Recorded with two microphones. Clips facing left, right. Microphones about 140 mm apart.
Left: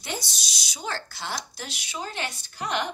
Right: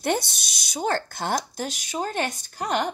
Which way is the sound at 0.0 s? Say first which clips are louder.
Right 10 dB; 55° right (ahead or behind).